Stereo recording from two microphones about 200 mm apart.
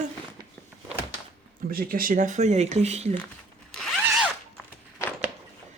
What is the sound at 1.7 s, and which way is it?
Speech, 45° right (ahead or behind).